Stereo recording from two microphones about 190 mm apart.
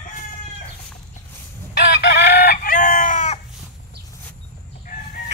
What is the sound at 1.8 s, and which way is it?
Chicken, 60° left (ahead or behind).